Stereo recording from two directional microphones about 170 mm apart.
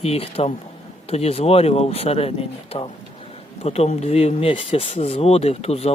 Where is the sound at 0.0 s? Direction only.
35° left (ahead or behind).